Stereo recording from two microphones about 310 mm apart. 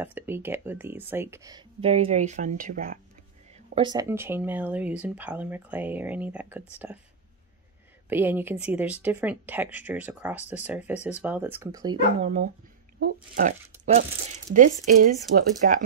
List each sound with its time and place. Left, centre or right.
0.0 s speech: centre; by 3.0 s right
3.5 s speech: centre
8.1 s speech: centre; by 15.0 s right
15.3 s speech: right